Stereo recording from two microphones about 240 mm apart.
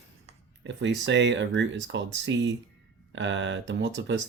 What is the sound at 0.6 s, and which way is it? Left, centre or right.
Speech, right.